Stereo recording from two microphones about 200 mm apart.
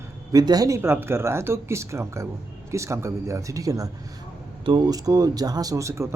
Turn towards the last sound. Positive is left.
turn(degrees=-15)  # may be behind; listen again after turning